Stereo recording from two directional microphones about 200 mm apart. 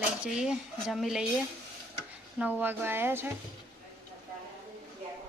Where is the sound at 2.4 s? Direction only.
10° right (ahead or behind).